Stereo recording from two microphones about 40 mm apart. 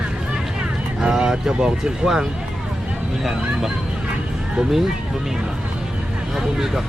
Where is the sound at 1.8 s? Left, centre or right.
Centre.